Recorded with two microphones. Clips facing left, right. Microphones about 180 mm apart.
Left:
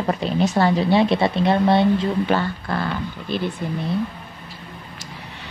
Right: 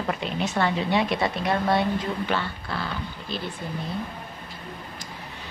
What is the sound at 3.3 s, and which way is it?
Speech, 60° left (ahead or behind).